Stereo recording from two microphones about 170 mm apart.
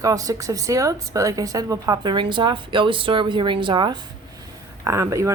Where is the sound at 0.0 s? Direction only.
20° right (ahead or behind).